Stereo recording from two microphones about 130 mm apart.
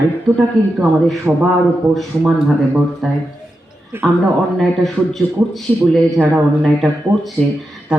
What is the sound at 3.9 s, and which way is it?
Speech, 20° right (ahead or behind).